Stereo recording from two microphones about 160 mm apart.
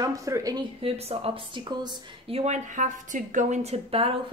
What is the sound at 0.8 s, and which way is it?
Speech, 40° right (ahead or behind).